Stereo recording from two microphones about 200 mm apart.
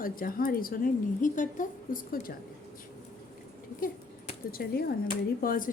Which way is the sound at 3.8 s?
45° left (ahead or behind).